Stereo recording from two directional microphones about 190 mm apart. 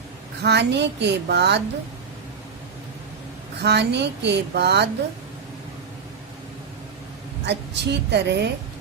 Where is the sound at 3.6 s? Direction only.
60° right (ahead or behind).